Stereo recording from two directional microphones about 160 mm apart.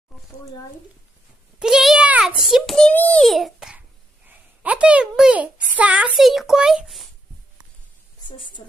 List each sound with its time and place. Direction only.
1.5 s a child's voice: 5° right (ahead or behind)
8.3 s a woman's voice: 30° left (ahead or behind)